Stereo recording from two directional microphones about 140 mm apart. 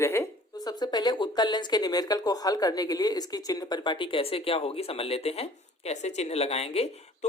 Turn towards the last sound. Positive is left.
turn(degrees=45)  # may be behind; listen again after turning